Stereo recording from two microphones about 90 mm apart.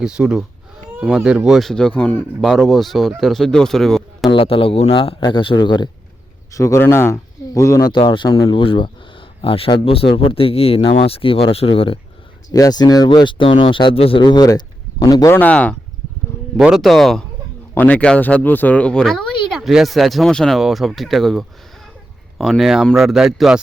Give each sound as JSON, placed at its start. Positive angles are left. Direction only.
{"t": 0.0, "sound": "speech", "side_deg": -10}
{"t": 2.4, "sound": "speech", "side_deg": 0}
{"t": 4.3, "sound": "a man's voice", "side_deg": 85}
{"t": 6.5, "sound": "speech", "side_deg": 35}
{"t": 7.9, "sound": "a man's voice", "side_deg": 65}
{"t": 9.4, "sound": "speech", "side_deg": 90}
{"t": 12.5, "sound": "speech", "side_deg": 40}
{"t": 14.2, "sound": "speech", "side_deg": 55}
{"t": 15.3, "sound": "speech", "side_deg": 20}
{"t": 16.6, "sound": "speech", "side_deg": -5}
{"t": 17.7, "sound": "speech", "side_deg": 15}